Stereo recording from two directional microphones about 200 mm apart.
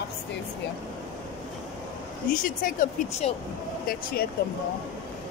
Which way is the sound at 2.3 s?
45° left (ahead or behind).